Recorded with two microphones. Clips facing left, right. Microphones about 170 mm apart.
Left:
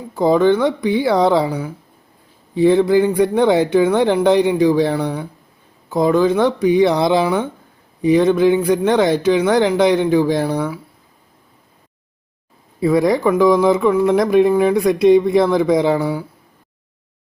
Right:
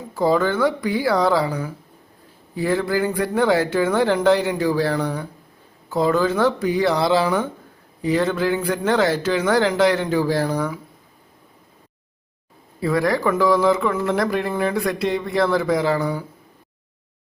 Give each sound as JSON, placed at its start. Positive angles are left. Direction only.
{"t": 0.1, "sound": "speech", "side_deg": 20}
{"t": 12.8, "sound": "speech", "side_deg": 20}
{"t": 16.0, "sound": "speech", "side_deg": 10}